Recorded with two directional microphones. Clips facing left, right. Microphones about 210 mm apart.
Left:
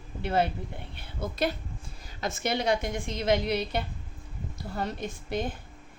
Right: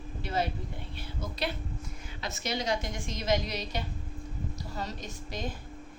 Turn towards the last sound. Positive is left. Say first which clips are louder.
# left 7 dB
turn(degrees=55)  # may be behind; listen again after turning